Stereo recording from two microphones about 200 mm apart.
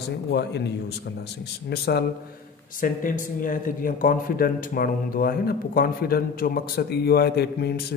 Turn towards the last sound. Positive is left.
turn(degrees=50)  # may be behind; listen again after turning